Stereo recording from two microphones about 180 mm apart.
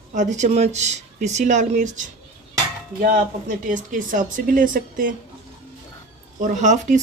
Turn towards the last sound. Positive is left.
turn(degrees=-40)  # may be behind; listen again after turning